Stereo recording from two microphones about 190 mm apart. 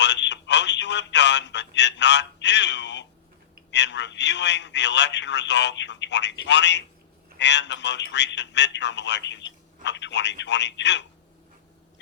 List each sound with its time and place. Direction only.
0.0 s telephone: 65° left (ahead or behind)
3.7 s a man's voice: 65° left (ahead or behind)